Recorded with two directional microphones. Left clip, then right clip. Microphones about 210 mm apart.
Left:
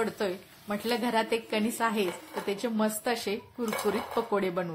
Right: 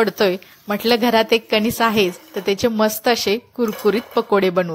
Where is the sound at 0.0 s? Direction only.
35° right (ahead or behind).